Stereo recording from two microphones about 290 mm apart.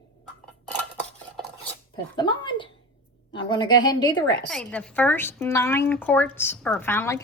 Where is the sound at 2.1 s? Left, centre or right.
Centre.